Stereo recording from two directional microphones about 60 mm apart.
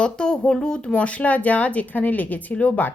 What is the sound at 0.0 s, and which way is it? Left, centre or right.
A woman's voice, centre.